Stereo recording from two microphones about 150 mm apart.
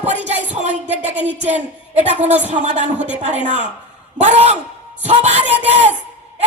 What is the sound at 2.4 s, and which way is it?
Speech, 50° right (ahead or behind).